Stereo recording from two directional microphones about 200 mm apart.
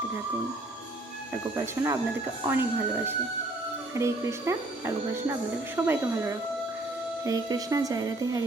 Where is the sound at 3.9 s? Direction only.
15° right (ahead or behind).